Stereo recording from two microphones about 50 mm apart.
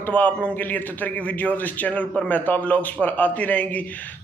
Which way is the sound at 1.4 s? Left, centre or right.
Left.